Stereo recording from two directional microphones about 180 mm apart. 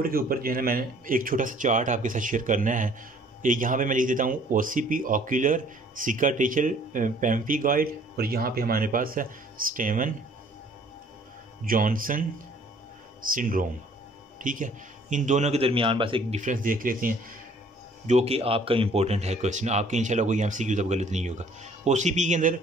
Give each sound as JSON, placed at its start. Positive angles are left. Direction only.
{"t": 0.0, "sound": "a man's voice", "side_deg": -55}
{"t": 11.6, "sound": "a man's voice", "side_deg": -50}
{"t": 13.3, "sound": "a man's voice", "side_deg": -50}
{"t": 16.3, "sound": "a man's voice", "side_deg": -45}
{"t": 18.0, "sound": "speech", "side_deg": -35}